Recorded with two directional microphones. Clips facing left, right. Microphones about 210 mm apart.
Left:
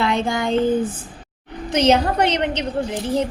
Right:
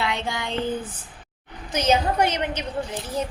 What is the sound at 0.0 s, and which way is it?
Speech, 50° left (ahead or behind).